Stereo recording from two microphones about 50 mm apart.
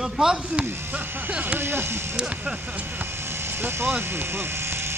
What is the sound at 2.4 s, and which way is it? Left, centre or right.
Speech, right.